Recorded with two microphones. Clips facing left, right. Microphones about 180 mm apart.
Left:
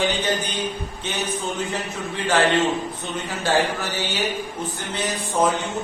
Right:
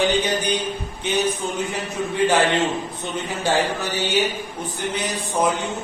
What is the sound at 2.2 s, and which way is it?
Speech, 15° right (ahead or behind).